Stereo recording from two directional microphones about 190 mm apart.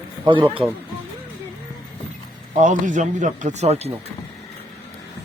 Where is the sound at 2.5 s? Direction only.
40° right (ahead or behind).